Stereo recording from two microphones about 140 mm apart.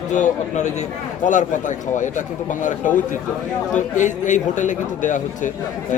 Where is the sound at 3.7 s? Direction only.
60° left (ahead or behind).